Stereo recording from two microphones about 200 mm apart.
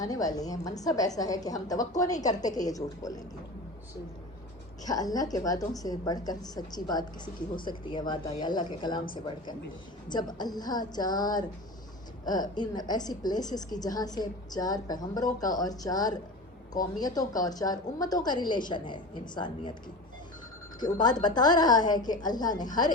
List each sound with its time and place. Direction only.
0.0 s a woman's voice: 20° left (ahead or behind)
4.9 s a woman's voice: 20° left (ahead or behind)
20.7 s a woman's voice: 20° left (ahead or behind)